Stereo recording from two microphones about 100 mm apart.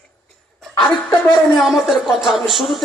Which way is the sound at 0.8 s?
10° left (ahead or behind).